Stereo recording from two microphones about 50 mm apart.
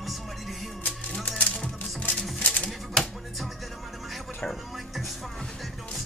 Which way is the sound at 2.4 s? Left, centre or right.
Left.